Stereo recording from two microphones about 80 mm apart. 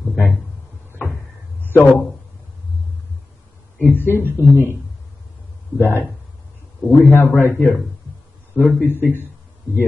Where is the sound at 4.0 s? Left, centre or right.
Left.